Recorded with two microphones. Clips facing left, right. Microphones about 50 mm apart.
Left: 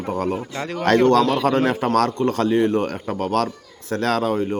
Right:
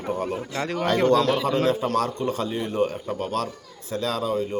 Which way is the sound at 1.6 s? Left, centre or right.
Left.